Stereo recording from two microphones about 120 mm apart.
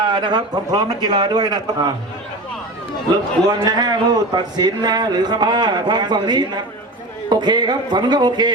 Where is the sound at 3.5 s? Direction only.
35° right (ahead or behind).